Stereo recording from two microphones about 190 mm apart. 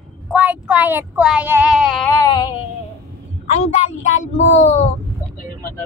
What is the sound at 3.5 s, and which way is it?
A woman's voice, 35° left (ahead or behind).